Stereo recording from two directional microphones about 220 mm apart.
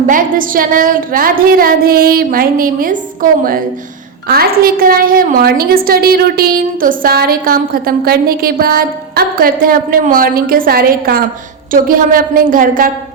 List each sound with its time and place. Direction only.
0.1 s a woman's voice: 40° right (ahead or behind)